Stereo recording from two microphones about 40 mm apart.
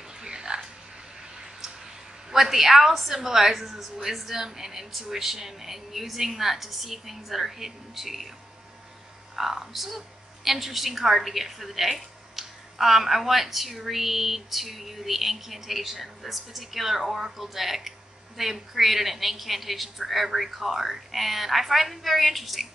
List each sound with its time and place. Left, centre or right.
0.2 s music: centre
2.3 s a woman's voice: centre
9.3 s a woman's voice: centre